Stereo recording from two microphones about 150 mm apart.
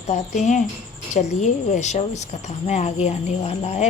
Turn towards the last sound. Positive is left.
turn(degrees=45)  # may be behind; listen again after turning